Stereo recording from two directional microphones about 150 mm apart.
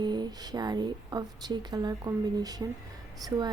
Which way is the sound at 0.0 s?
30° right (ahead or behind).